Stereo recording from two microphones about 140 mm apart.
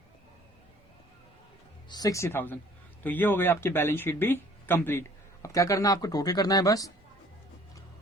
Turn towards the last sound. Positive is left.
turn(degrees=25)  # may be behind; listen again after turning